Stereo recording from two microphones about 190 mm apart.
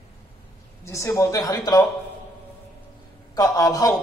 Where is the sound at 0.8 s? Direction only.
15° left (ahead or behind).